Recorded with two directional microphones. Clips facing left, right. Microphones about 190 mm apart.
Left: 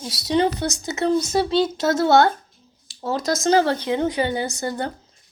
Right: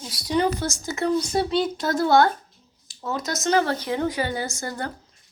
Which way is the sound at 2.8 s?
30° left (ahead or behind).